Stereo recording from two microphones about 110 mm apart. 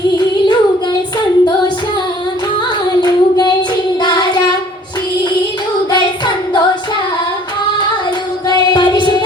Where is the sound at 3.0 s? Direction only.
40° left (ahead or behind).